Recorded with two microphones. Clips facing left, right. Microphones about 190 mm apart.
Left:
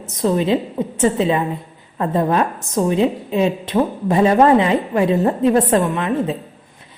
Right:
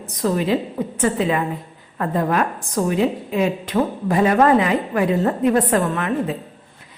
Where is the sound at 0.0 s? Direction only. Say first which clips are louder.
Left 3 dB; 25° left (ahead or behind).